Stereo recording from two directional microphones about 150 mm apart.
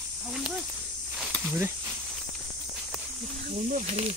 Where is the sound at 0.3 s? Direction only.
Centre (ahead or behind).